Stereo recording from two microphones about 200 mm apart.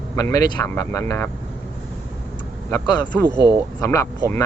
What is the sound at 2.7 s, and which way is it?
Speech, 20° left (ahead or behind).